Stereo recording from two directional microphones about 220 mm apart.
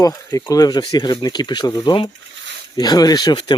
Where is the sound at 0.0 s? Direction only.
15° left (ahead or behind).